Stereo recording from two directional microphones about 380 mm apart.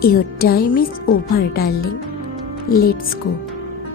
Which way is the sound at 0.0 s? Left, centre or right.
Left.